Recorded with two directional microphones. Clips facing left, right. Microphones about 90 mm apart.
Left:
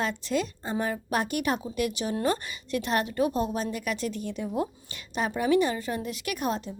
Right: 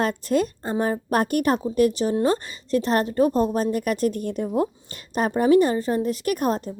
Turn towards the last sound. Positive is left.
turn(degrees=-45)  # may be behind; listen again after turning